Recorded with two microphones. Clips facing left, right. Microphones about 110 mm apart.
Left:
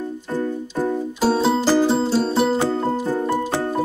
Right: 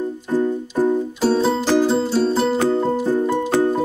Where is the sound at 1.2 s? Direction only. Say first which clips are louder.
Left 1 dB; 5° left (ahead or behind).